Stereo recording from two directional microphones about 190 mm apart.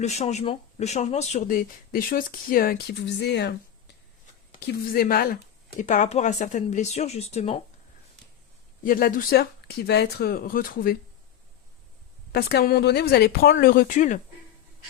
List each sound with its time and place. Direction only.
0.0 s speech: 35° left (ahead or behind); by 3.5 s 65° left (ahead or behind)
4.6 s speech: 55° left (ahead or behind); by 7.6 s 35° left (ahead or behind)
8.8 s speech: 50° left (ahead or behind)
12.3 s speech: 55° left (ahead or behind)